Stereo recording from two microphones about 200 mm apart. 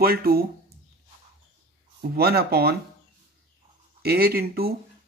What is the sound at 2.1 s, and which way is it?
Speech, 50° right (ahead or behind).